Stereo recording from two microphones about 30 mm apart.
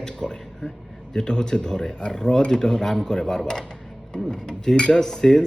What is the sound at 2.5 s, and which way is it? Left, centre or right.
Speech, left.